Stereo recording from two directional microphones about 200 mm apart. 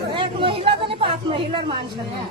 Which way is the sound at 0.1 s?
25° right (ahead or behind).